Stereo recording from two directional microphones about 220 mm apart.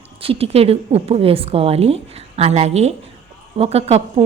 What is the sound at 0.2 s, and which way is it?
A woman's voice, 25° right (ahead or behind).